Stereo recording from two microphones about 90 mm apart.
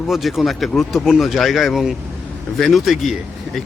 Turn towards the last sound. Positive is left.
turn(degrees=0)  # may be behind; listen again after turning